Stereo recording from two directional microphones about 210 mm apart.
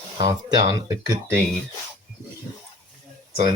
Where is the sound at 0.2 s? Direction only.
20° right (ahead or behind).